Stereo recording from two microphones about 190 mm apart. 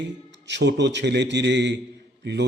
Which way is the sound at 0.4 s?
65° right (ahead or behind).